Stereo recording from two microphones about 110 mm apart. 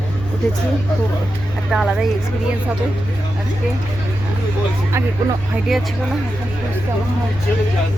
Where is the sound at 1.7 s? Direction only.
5° right (ahead or behind).